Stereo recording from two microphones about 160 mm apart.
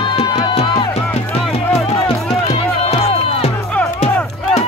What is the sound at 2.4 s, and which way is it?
Music, 40° left (ahead or behind).